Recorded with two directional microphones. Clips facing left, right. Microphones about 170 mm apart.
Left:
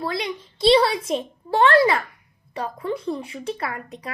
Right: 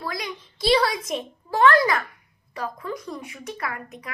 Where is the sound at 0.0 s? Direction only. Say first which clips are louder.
Left 5 dB; 30° left (ahead or behind).